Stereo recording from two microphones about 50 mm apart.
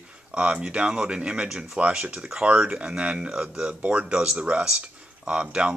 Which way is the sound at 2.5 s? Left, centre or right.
Right.